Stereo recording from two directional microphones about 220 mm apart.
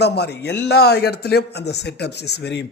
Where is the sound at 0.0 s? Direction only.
50° left (ahead or behind).